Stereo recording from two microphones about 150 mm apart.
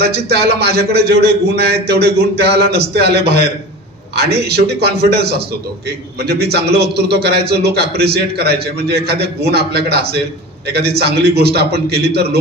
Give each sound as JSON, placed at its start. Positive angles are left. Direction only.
{"t": 0.0, "sound": "a man's voice", "side_deg": -90}